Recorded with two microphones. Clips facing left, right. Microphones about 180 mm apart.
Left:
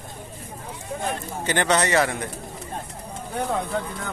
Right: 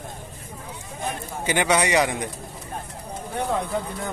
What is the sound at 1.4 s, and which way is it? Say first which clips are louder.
Speech: right 1 dB; 10° right (ahead or behind).